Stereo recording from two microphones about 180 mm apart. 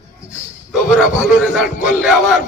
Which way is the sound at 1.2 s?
5° right (ahead or behind).